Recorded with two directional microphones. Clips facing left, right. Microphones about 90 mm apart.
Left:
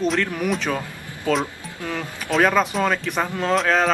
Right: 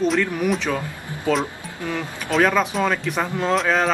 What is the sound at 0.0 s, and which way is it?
Speech, 5° right (ahead or behind).